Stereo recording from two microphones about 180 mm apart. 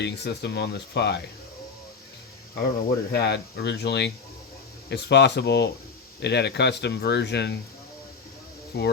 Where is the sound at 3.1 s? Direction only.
65° left (ahead or behind).